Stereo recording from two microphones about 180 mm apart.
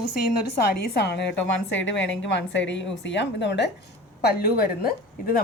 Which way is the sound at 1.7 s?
90° left.